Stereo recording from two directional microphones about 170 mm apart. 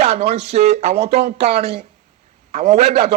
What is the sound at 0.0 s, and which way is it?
A man's voice, 40° right (ahead or behind).